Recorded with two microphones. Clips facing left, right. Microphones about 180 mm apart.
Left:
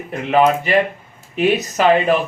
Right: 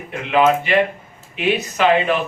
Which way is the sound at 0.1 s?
40° left (ahead or behind).